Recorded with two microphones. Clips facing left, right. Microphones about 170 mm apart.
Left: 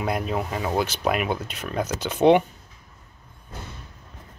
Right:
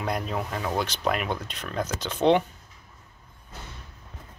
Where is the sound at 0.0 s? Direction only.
5° left (ahead or behind).